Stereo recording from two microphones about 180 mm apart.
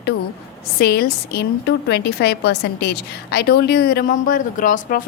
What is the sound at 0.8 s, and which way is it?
A woman's voice, 60° left (ahead or behind).